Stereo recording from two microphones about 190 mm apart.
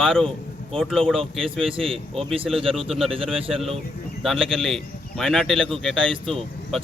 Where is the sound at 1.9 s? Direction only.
30° right (ahead or behind).